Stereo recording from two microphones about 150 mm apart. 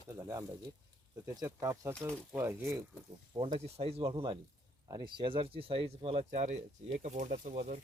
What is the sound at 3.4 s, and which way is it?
Speech, 40° right (ahead or behind).